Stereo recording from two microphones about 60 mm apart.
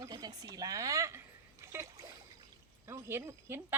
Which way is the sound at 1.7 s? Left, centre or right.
Right.